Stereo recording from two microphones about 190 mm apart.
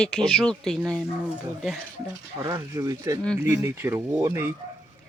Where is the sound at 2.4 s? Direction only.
20° right (ahead or behind).